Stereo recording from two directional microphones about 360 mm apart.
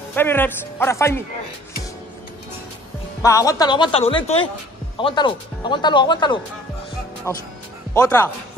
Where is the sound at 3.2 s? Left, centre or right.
Centre.